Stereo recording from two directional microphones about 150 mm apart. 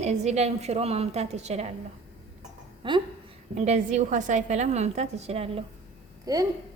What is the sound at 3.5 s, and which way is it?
A woman's voice, 50° right (ahead or behind).